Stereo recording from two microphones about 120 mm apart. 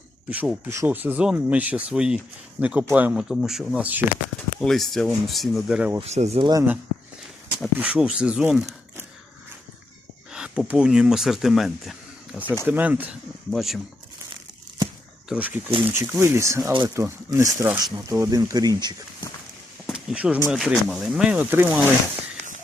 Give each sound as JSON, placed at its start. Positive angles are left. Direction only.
{"t": 0.3, "sound": "speech", "side_deg": -10}
{"t": 3.8, "sound": "speech", "side_deg": -10}
{"t": 4.6, "sound": "speech", "side_deg": 0}
{"t": 6.0, "sound": "speech", "side_deg": -65}
{"t": 6.4, "sound": "speech", "side_deg": -30}
{"t": 7.8, "sound": "speech", "side_deg": -10}
{"t": 10.3, "sound": "speech", "side_deg": -5}
{"t": 12.6, "sound": "speech", "side_deg": -15}
{"t": 13.5, "sound": "speech", "side_deg": 0}
{"t": 15.3, "sound": "speech", "side_deg": -10}
{"t": 19.9, "sound": "a sound", "side_deg": -5}
{"t": 20.5, "sound": "speech", "side_deg": -5}